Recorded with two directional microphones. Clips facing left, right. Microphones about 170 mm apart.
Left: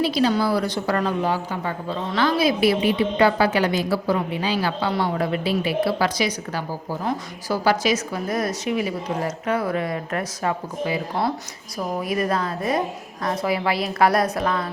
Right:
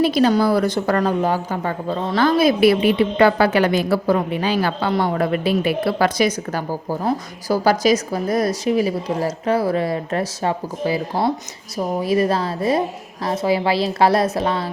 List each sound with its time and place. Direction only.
0.0 s a woman's voice: 50° right (ahead or behind); by 14.7 s 30° right (ahead or behind)